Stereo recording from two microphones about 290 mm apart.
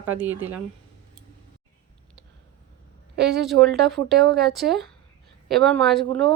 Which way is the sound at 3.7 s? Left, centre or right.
Centre.